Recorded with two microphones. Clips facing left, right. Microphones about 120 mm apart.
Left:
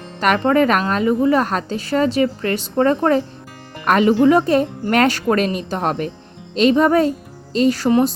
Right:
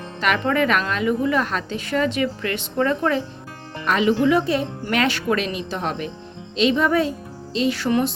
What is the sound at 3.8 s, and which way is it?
A woman's voice, 50° left (ahead or behind).